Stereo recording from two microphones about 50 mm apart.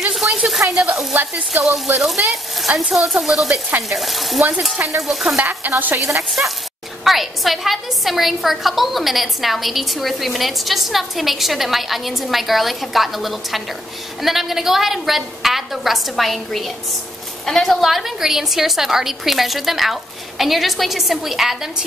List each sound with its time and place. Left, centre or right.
0.1 s a sound: centre
1.1 s stir: right
2.0 s a woman's voice: centre
5.4 s stir: right
6.4 s speech: centre
7.1 s a woman's voice: centre